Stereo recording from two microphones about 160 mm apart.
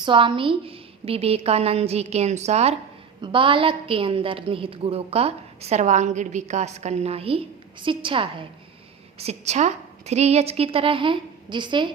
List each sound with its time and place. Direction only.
0.0 s a woman's voice: 30° right (ahead or behind)